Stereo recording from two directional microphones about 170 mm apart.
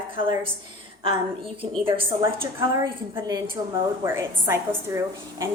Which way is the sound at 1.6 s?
30° right (ahead or behind).